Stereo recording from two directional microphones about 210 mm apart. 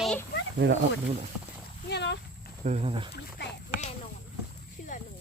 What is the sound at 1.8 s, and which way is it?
Horse, 55° left (ahead or behind).